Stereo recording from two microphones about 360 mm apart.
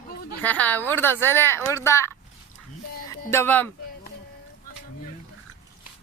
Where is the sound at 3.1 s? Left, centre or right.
Centre.